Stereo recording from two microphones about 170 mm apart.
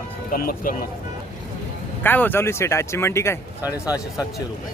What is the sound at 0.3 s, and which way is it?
Speech, 55° left (ahead or behind).